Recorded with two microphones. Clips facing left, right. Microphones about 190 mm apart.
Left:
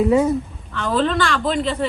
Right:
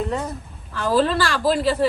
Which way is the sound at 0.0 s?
5° left (ahead or behind).